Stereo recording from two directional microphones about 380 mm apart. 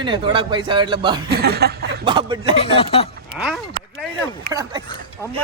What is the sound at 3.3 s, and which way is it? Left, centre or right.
Speech, centre.